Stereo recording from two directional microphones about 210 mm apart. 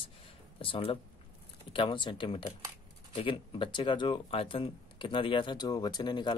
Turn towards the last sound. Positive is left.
turn(degrees=20)  # may be behind; listen again after turning